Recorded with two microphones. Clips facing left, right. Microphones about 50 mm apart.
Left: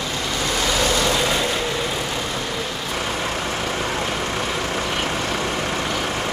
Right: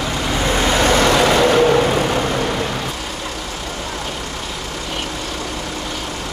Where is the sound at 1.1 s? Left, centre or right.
Right.